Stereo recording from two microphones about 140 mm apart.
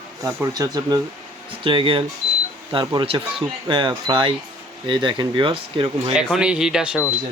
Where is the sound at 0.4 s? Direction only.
25° right (ahead or behind).